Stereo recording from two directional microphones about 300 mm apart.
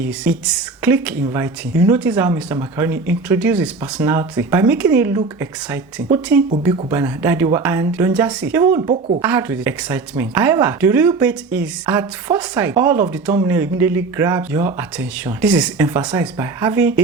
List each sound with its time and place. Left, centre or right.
0.0 s speech: centre